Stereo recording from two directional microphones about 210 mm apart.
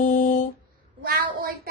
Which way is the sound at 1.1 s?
45° right (ahead or behind).